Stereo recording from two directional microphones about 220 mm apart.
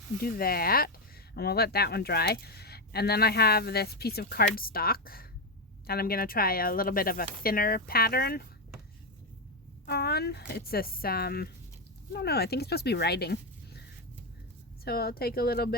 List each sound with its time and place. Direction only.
0.2 s speech: 40° left (ahead or behind)
9.8 s speech: 45° left (ahead or behind)
14.8 s speech: 45° left (ahead or behind)